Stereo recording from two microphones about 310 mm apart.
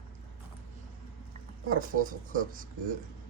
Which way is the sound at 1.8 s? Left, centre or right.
Right.